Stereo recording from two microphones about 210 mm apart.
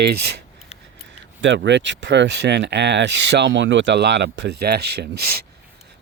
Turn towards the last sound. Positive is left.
turn(degrees=-45)  # may be behind; listen again after turning